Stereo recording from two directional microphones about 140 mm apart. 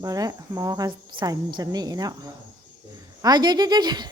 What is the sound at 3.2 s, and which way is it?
Speech, 30° right (ahead or behind).